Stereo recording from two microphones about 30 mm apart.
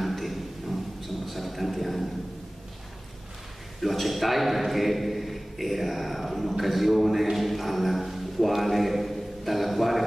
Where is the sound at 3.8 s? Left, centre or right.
Centre.